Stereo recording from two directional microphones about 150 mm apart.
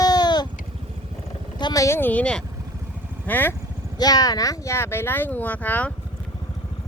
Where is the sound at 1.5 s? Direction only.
25° left (ahead or behind).